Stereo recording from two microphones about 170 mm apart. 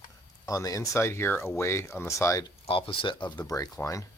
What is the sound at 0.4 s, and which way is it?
Speech, 20° left (ahead or behind).